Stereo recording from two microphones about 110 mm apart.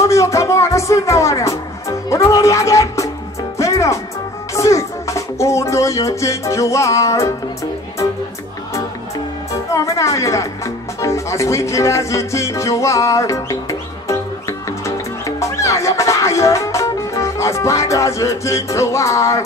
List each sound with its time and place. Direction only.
0.0 s music: 30° left (ahead or behind)
9.5 s speech: 30° left (ahead or behind)
15.2 s music: 30° left (ahead or behind)